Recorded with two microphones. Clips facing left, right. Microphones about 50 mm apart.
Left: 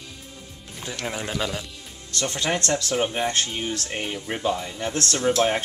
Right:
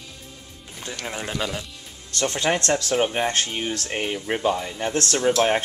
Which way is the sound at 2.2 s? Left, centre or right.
Right.